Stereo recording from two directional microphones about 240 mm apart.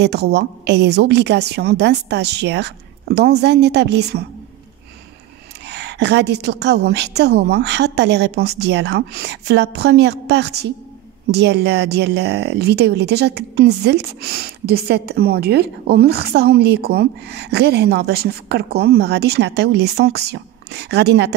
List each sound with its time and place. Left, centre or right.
0.0 s a woman's voice: right
5.7 s a woman's voice: right